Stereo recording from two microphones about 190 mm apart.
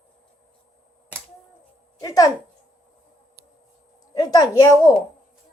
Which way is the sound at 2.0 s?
20° left (ahead or behind).